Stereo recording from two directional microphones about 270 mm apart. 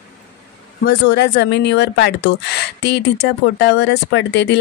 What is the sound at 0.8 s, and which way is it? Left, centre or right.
A woman's voice, left.